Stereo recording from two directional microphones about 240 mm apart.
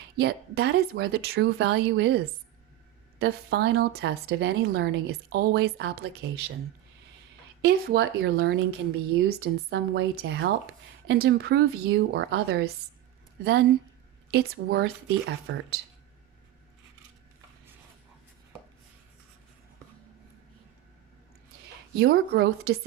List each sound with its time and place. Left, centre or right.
0.2 s speech: right
7.6 s a woman's voice: right
21.9 s a woman's voice: right